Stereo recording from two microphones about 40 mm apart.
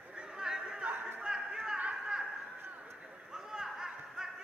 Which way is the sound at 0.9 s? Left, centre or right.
Right.